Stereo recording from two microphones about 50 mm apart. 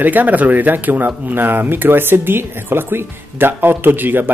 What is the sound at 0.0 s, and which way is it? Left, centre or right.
Speech, right.